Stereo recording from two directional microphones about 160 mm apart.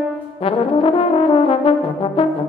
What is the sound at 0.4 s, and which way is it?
Brass instrument, 35° left (ahead or behind).